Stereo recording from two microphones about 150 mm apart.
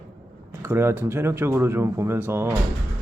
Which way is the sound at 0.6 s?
15° right (ahead or behind).